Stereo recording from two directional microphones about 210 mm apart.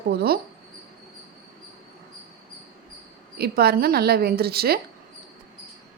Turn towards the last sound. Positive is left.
turn(degrees=-45)  # may be behind; listen again after turning